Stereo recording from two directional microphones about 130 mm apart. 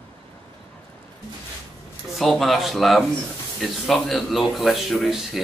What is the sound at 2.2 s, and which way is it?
Speech, centre (ahead or behind).